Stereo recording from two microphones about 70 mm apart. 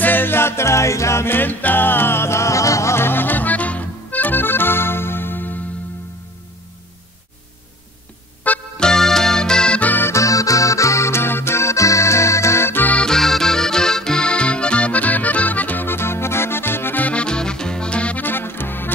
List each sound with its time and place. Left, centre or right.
0.0 s music: left
8.7 s music: centre
10.0 s accordion: left
12.9 s accordion: centre; by 18.9 s left